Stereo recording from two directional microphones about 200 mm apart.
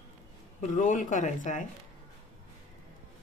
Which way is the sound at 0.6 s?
40° left (ahead or behind).